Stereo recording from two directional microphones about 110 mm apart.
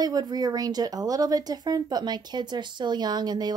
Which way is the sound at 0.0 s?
40° right (ahead or behind).